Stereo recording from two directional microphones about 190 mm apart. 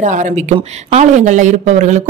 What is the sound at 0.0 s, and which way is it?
Speech, 40° right (ahead or behind).